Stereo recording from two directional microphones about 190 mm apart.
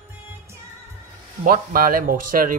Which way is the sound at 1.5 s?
50° right (ahead or behind).